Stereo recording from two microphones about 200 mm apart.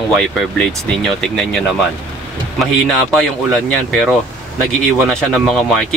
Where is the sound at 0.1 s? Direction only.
Centre (ahead or behind).